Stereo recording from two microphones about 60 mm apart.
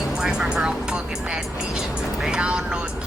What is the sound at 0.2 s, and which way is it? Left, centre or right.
Speech, centre.